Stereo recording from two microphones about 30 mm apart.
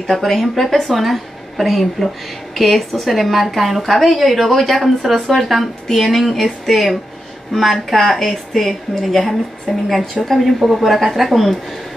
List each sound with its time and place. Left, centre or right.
0.0 s speech: centre
0.4 s a woman's voice: centre
5.9 s a woman's voice: centre